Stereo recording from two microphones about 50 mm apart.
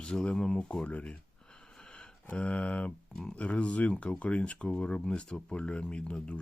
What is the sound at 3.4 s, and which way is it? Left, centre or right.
Speech, left.